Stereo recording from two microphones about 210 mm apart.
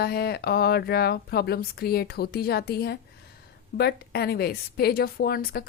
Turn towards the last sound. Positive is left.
turn(degrees=45)  # may be behind; listen again after turning